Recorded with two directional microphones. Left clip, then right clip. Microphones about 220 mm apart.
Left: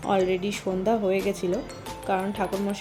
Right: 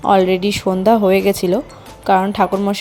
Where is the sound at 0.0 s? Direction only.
40° right (ahead or behind).